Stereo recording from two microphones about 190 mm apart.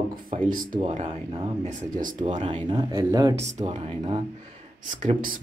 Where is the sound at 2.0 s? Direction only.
45° right (ahead or behind).